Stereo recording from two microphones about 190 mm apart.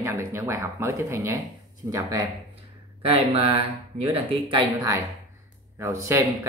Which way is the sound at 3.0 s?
30° right (ahead or behind).